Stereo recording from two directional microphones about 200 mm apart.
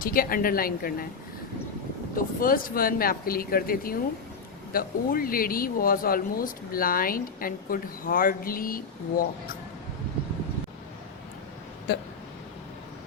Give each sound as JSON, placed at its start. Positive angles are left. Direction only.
{"t": 0.0, "sound": "speech", "side_deg": 45}
{"t": 2.1, "sound": "speech", "side_deg": 45}
{"t": 11.9, "sound": "speech", "side_deg": 55}